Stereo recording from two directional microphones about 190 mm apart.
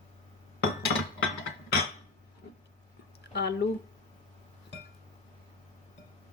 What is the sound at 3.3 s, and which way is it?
Speech, 60° left (ahead or behind).